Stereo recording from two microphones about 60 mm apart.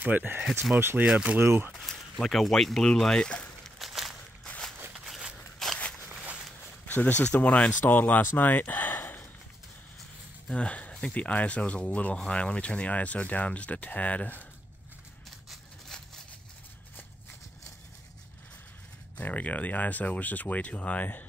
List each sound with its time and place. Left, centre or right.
0.0 s speech: right
1.4 s speech: right
1.8 s speech: centre
3.8 s a sound: centre
4.9 s walk: centre
6.9 s speech: left
10.5 s speech: centre
15.9 s a sound: centre
19.1 s speech: left